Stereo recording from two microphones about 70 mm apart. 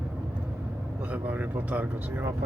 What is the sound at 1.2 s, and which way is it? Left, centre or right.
Speech, right.